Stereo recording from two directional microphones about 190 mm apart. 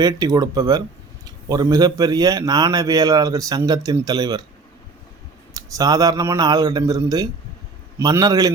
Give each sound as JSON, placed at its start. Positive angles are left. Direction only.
{"t": 0.0, "sound": "a man's voice", "side_deg": -20}
{"t": 5.5, "sound": "a man's voice", "side_deg": -20}